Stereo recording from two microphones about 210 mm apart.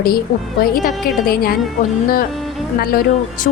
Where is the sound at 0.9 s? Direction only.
Centre (ahead or behind).